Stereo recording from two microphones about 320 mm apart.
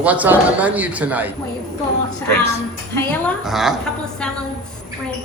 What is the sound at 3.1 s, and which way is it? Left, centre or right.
Speech, centre.